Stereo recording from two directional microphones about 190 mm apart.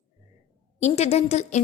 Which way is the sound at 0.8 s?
35° left (ahead or behind).